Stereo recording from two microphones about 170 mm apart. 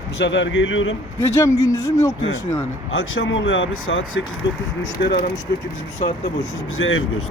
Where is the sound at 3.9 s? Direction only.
90° left.